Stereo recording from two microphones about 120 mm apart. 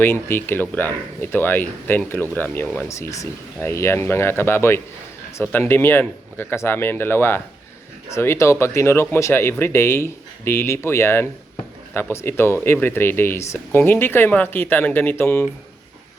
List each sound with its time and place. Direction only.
0.0 s speech: 20° left (ahead or behind)